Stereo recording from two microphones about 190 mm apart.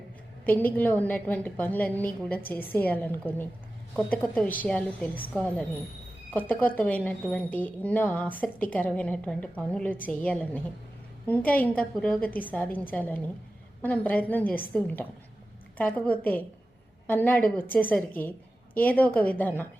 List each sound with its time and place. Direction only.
0.4 s a woman's voice: 10° left (ahead or behind)
6.3 s a woman's voice: 10° left (ahead or behind)